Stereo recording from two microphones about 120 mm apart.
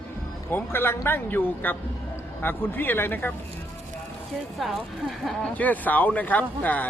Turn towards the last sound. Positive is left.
turn(degrees=15)  # may be behind; listen again after turning